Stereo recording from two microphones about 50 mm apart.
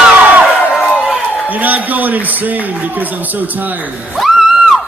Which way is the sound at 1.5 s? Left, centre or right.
Right.